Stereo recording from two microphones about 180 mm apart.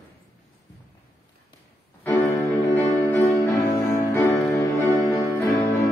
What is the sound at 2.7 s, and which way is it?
Music, 15° left (ahead or behind).